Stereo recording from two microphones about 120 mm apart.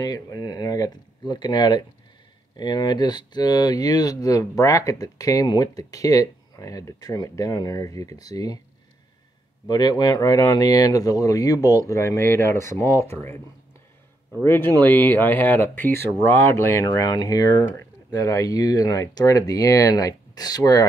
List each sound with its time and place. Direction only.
0.0 s speech: 30° left (ahead or behind)
9.7 s speech: 35° left (ahead or behind)
14.4 s speech: 20° left (ahead or behind)